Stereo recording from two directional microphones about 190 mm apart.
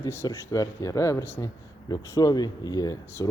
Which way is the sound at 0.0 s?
15° left (ahead or behind).